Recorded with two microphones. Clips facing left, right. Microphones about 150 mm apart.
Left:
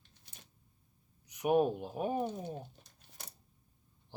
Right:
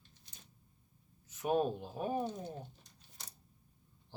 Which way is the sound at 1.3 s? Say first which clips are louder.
Left 4 dB; 15° left (ahead or behind).